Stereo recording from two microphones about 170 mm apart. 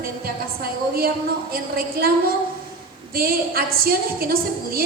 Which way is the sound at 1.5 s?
60° right (ahead or behind).